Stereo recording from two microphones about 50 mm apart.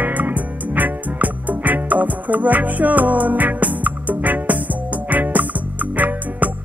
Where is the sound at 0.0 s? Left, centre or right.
Right.